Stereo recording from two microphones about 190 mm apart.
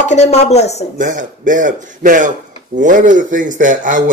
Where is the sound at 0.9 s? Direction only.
45° right (ahead or behind).